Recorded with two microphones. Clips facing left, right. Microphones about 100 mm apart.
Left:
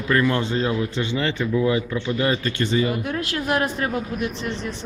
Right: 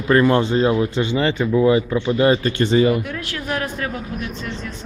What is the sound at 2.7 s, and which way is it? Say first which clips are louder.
Speech: right 7 dB; 60° right (ahead or behind).